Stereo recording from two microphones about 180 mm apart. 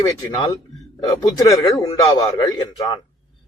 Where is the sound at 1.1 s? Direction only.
20° left (ahead or behind).